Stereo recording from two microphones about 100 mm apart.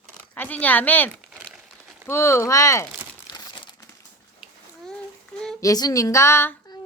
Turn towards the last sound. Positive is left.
turn(degrees=25)  # may be behind; listen again after turning